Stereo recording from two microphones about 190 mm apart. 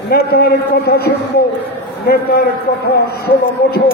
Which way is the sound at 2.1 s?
55° left (ahead or behind).